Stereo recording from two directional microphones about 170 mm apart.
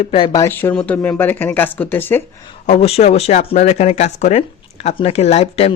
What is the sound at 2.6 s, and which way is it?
Speech, 40° left (ahead or behind).